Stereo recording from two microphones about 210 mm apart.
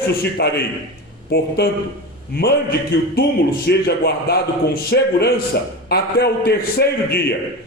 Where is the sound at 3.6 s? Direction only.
50° left (ahead or behind).